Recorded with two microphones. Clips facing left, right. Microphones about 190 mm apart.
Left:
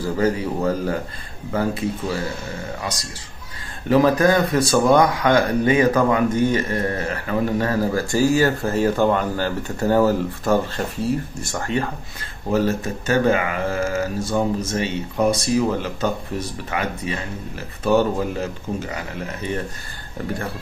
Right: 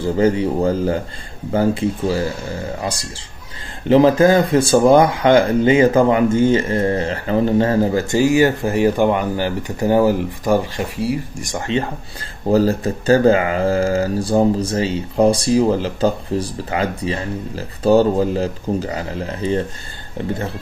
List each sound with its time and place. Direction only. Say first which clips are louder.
0.0 s speech: right 5 dB; 30° right (ahead or behind)
12.4 s speech: right 5 dB; 35° right (ahead or behind)